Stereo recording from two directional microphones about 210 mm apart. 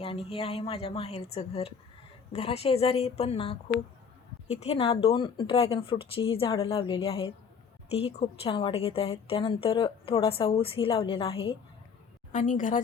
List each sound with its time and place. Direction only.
0.0 s a woman's voice: 25° left (ahead or behind)
4.6 s a woman's voice: 30° left (ahead or behind)
12.3 s a woman's voice: 40° left (ahead or behind)